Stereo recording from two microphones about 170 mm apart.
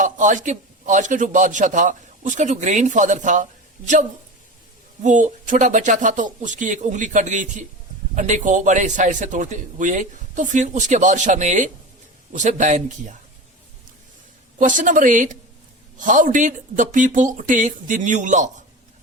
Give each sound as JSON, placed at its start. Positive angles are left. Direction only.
{"t": 0.0, "sound": "a man's voice", "side_deg": -50}
{"t": 5.0, "sound": "a man's voice", "side_deg": -45}
{"t": 14.6, "sound": "a man's voice", "side_deg": -50}